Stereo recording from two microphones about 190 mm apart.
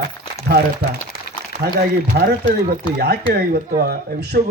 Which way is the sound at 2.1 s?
60° right (ahead or behind).